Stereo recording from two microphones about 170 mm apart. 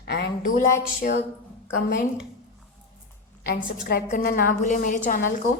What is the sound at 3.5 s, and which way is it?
A woman's voice, 55° left (ahead or behind).